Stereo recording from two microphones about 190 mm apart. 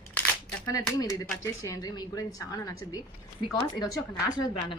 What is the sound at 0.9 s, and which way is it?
A woman's voice, 15° left (ahead or behind).